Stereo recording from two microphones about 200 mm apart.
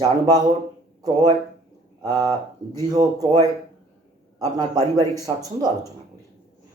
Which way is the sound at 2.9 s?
20° right (ahead or behind).